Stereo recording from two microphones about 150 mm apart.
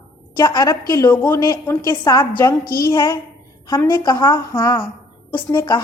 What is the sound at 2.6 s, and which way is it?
Speech, 85° left.